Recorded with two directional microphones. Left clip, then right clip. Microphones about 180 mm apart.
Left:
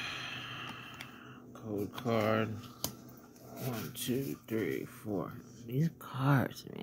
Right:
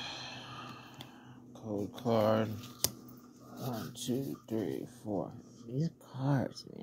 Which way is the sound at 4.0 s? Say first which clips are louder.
Left 2 dB; 15° left (ahead or behind).